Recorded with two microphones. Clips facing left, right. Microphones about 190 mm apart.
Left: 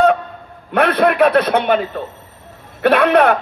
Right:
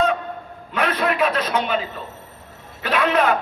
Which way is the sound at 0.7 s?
60° left (ahead or behind).